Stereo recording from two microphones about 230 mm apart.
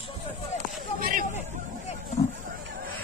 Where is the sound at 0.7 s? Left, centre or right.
Right.